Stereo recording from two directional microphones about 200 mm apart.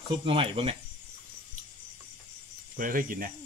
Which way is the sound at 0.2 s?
25° right (ahead or behind).